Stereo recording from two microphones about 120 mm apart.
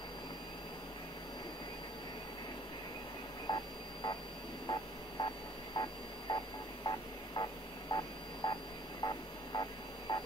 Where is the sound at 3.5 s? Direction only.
35° left (ahead or behind).